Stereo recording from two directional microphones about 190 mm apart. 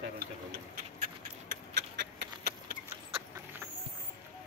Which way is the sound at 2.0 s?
60° right (ahead or behind).